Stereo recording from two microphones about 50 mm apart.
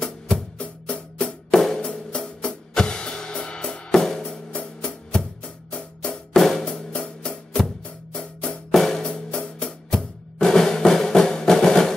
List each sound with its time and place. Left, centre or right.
1.1 s music: centre
4.3 s music: left
6.3 s drum: centre
8.1 s music: centre
8.7 s music: centre